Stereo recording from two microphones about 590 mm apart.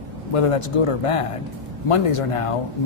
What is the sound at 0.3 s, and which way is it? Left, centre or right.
Speech, left.